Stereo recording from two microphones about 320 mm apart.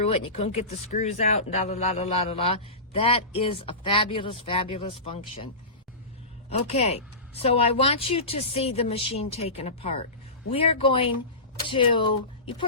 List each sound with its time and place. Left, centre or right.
0.3 s speech: centre
6.5 s speech: centre